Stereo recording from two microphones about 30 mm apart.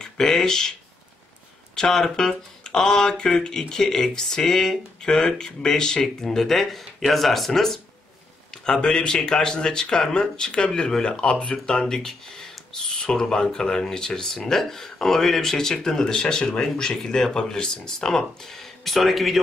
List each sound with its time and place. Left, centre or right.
0.0 s speech: centre
1.8 s speech: centre
8.6 s speech: left
10.7 s speech: centre
11.0 s speech: left
11.8 s speech: centre
18.9 s speech: centre